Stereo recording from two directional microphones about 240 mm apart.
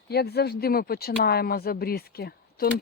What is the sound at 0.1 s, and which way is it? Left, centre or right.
Speech, left.